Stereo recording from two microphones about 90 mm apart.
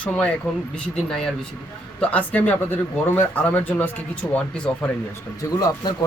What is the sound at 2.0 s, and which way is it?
Speech, 15° left (ahead or behind).